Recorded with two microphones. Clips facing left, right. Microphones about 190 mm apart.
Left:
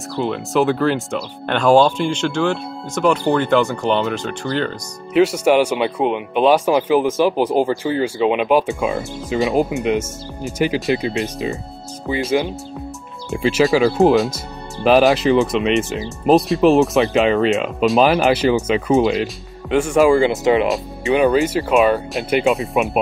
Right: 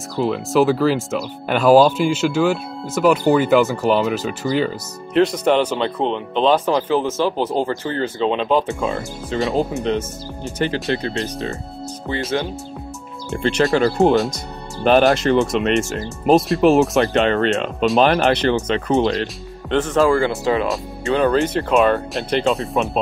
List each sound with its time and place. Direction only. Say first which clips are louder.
0.1 s speech: right 1 dB; centre (ahead or behind)
5.2 s speech: left 2 dB; 10° left (ahead or behind)
21.3 s speech: left 1 dB; 5° left (ahead or behind)